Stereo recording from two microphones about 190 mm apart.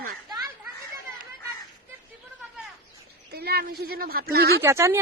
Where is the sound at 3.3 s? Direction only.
55° right (ahead or behind).